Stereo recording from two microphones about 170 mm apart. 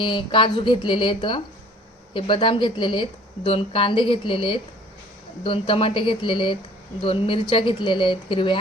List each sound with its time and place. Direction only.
0.0 s speech: 30° left (ahead or behind)